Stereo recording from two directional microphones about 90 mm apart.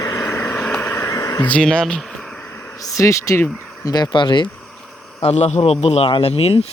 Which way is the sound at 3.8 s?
50° left (ahead or behind).